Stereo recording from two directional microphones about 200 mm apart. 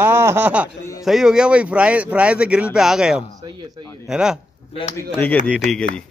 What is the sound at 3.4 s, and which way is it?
Speech, 20° right (ahead or behind).